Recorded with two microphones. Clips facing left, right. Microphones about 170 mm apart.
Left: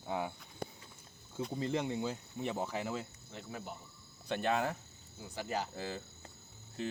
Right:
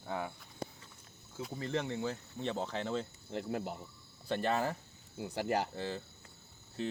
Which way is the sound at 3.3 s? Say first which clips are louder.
Right 8 dB; 65° right (ahead or behind).